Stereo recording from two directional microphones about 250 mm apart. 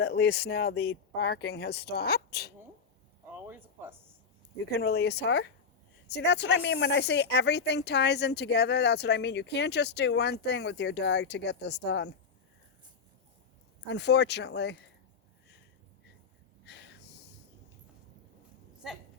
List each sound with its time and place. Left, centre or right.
0.0 s speech: left
3.3 s a sound: centre
4.7 s speech: left
13.8 s speech: left
16.6 s snort: left